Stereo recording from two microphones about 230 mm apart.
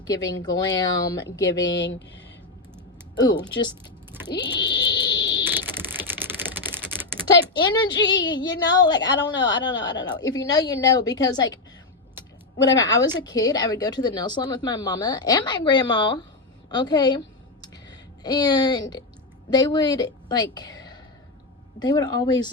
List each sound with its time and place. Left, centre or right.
0.1 s a woman's voice: centre
1.7 s speech: left
3.2 s a woman's voice: centre
4.6 s a sound: centre
5.5 s typing: centre
7.5 s speech: centre
7.9 s speech: left
8.7 s a woman's voice: centre
12.7 s a woman's voice: centre
16.6 s a sound: centre
18.2 s a woman's voice: centre